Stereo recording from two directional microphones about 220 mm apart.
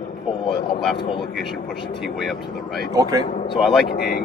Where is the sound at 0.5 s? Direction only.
Centre (ahead or behind).